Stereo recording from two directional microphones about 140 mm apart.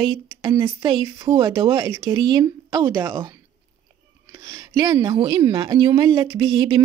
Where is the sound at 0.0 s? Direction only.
35° right (ahead or behind); by 3.3 s 15° right (ahead or behind).